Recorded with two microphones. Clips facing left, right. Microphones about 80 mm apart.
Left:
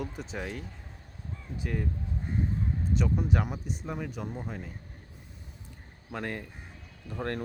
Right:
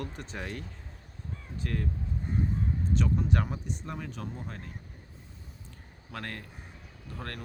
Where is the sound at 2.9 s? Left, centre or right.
Centre.